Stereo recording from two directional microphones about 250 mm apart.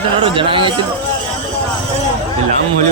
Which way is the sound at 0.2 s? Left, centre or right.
Right.